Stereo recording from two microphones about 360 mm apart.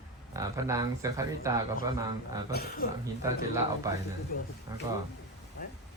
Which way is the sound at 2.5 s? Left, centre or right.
Left.